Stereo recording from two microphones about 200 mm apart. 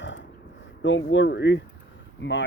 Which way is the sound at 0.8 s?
65° left (ahead or behind).